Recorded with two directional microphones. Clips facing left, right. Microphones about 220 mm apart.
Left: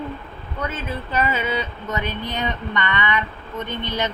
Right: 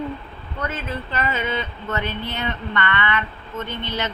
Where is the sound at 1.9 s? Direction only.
15° left (ahead or behind).